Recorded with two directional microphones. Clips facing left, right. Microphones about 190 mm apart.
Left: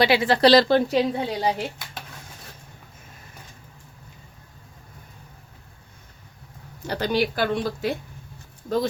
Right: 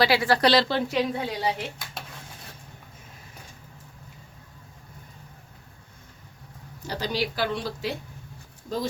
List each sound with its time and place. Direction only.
0.0 s a woman's voice: 20° left (ahead or behind)
0.4 s a woman's voice: 40° left (ahead or behind)
6.8 s speech: 60° left (ahead or behind)